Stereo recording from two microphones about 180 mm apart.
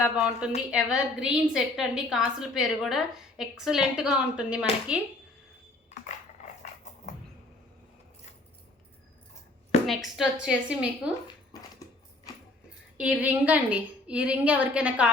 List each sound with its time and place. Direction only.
0.0 s a woman's voice: 5° right (ahead or behind)
5.9 s coin: 40° left (ahead or behind)
9.8 s a woman's voice: centre (ahead or behind)
11.5 s dog: 20° left (ahead or behind)
13.0 s a woman's voice: 5° right (ahead or behind)